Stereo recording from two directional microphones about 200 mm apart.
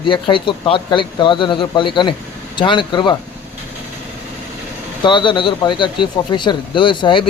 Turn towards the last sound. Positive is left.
turn(degrees=25)  # may be behind; listen again after turning